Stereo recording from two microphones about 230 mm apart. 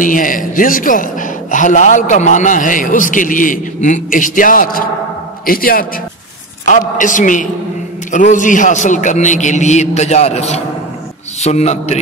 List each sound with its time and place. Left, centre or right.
0.0 s a man's voice: left